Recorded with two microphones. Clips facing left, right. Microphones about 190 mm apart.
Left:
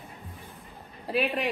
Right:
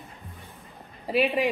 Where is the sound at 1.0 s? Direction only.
5° right (ahead or behind).